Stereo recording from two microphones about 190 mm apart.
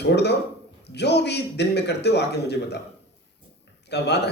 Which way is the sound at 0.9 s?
60° left (ahead or behind).